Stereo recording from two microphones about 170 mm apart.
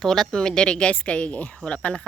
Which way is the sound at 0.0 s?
Centre (ahead or behind).